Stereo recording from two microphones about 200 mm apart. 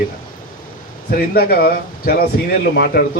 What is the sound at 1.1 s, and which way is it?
Speech, 50° left (ahead or behind).